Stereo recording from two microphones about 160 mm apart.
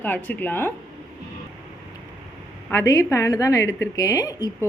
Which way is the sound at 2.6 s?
20° left (ahead or behind).